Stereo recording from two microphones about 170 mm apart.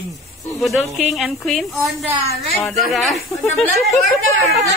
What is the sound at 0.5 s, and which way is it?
Speech, centre (ahead or behind).